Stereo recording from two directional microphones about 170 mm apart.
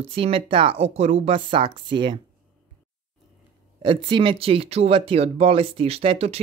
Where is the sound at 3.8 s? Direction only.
30° right (ahead or behind).